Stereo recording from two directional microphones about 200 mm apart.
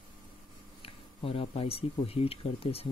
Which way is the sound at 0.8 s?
30° left (ahead or behind).